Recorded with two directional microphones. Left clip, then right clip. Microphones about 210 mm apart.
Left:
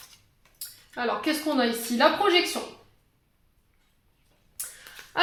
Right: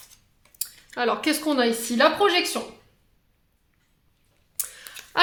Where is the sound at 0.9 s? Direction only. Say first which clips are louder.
Right 3 dB; 50° right (ahead or behind).